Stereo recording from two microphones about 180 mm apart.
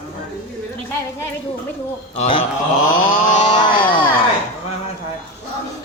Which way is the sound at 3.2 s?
45° left (ahead or behind).